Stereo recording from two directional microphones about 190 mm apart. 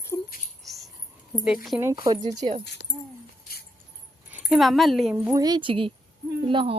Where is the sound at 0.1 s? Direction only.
15° left (ahead or behind).